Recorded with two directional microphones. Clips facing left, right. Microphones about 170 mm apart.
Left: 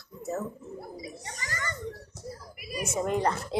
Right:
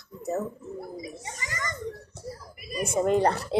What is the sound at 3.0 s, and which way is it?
Speech, 30° right (ahead or behind).